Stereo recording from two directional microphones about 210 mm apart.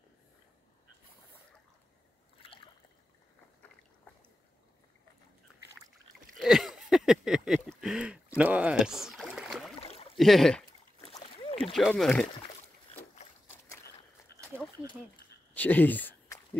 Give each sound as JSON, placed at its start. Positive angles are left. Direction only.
{"t": 2.4, "sound": "rowboat", "side_deg": 25}
{"t": 6.3, "sound": "a sound", "side_deg": 0}
{"t": 9.8, "sound": "rowboat", "side_deg": 30}
{"t": 10.1, "sound": "speech", "side_deg": 0}
{"t": 11.1, "sound": "boat", "side_deg": 25}
{"t": 11.7, "sound": "speech", "side_deg": 0}
{"t": 15.5, "sound": "a sound", "side_deg": 10}